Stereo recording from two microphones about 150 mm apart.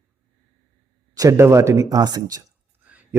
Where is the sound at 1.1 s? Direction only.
20° right (ahead or behind).